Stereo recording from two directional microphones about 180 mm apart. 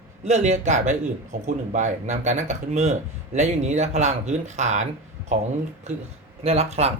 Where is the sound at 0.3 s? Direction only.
40° right (ahead or behind).